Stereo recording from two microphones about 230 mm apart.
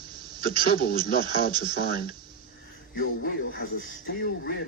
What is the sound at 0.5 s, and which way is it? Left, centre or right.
Speech, centre.